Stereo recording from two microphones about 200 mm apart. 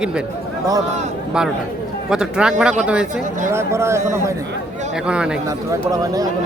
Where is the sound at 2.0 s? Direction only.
5° right (ahead or behind).